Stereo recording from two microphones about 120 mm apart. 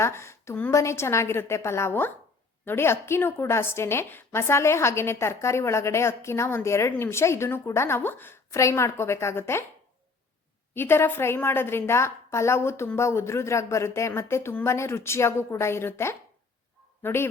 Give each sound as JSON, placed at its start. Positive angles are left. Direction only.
{"t": 0.0, "sound": "a woman's voice", "side_deg": 20}
{"t": 10.8, "sound": "a woman's voice", "side_deg": 20}